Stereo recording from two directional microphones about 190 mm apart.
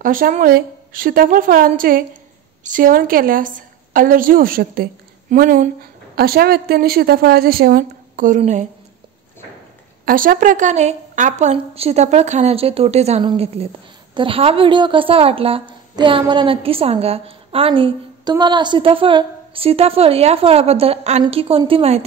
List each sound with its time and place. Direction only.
0.0 s a woman's voice: 45° right (ahead or behind)
10.0 s a woman's voice: 50° right (ahead or behind); by 22.0 s 30° right (ahead or behind)